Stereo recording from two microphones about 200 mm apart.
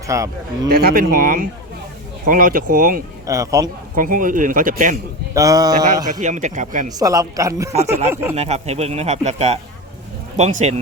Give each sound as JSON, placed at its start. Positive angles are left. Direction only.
{"t": 0.1, "sound": "a woman's voice", "side_deg": -15}
{"t": 0.7, "sound": "speech", "side_deg": -50}
{"t": 3.2, "sound": "a woman's voice", "side_deg": -15}
{"t": 3.9, "sound": "speech", "side_deg": -45}
{"t": 5.3, "sound": "speech", "side_deg": -15}
{"t": 6.1, "sound": "speech", "side_deg": -40}
{"t": 6.9, "sound": "a woman's voice", "side_deg": -20}
{"t": 8.4, "sound": "speech", "side_deg": -35}